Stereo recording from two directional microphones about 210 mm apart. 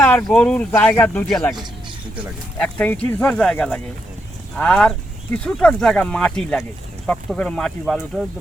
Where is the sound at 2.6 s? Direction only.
5° left (ahead or behind).